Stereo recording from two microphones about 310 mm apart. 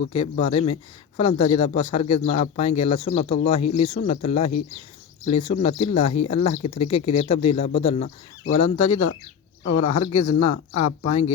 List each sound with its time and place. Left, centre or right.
0.1 s speech: centre